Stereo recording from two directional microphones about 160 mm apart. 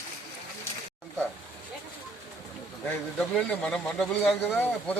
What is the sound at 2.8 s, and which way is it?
Speech, 10° left (ahead or behind).